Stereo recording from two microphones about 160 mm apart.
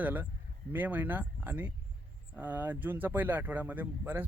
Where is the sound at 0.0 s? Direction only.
10° right (ahead or behind).